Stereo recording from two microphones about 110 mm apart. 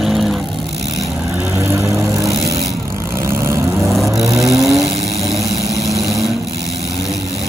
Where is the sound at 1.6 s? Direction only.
25° right (ahead or behind).